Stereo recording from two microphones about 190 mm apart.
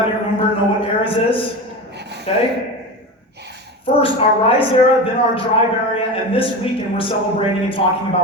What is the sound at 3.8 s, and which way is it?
Speech, 30° left (ahead or behind).